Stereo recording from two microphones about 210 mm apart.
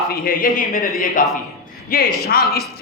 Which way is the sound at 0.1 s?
40° left (ahead or behind).